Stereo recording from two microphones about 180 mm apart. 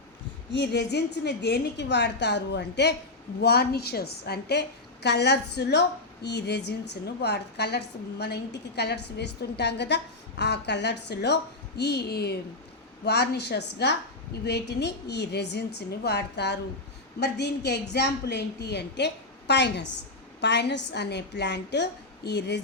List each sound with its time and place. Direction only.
0.5 s a woman's voice: 70° left (ahead or behind)